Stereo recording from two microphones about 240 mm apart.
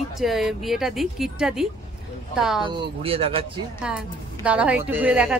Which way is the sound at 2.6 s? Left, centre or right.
Right.